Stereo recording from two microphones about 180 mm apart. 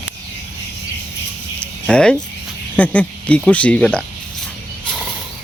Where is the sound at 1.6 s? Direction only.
5° left (ahead or behind).